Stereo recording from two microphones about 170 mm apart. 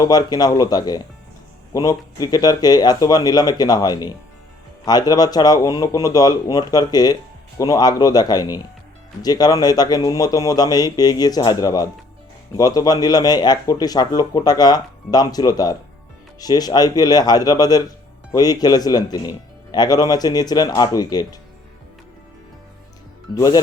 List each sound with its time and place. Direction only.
0.0 s a man's voice: 20° left (ahead or behind)
23.3 s a man's voice: 20° left (ahead or behind)